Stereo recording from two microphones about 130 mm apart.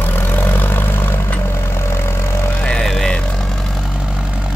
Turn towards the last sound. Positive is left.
turn(degrees=10)  # may be behind; listen again after turning